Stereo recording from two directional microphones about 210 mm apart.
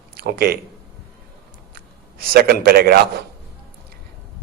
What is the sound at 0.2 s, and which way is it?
Speech, 45° right (ahead or behind).